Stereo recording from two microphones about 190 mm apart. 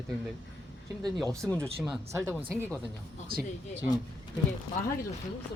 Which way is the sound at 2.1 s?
15° right (ahead or behind).